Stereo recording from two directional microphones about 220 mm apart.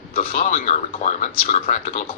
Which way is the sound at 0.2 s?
35° left (ahead or behind).